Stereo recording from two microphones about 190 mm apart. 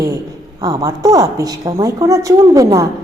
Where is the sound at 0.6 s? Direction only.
20° right (ahead or behind).